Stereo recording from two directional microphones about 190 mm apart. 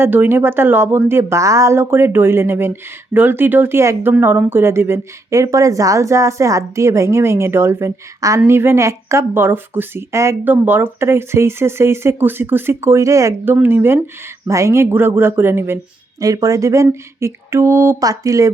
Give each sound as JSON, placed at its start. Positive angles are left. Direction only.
{"t": 0.0, "sound": "speech", "side_deg": -10}